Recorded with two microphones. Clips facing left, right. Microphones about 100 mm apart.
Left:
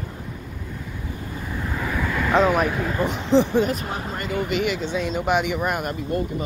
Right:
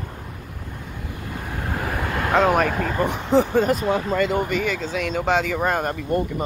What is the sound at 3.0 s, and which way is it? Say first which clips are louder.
Speech: even; 50° right (ahead or behind).